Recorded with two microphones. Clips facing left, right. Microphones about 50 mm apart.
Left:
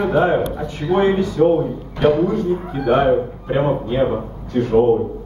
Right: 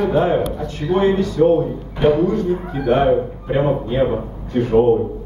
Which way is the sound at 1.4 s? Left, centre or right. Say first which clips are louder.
Right 1 dB; centre.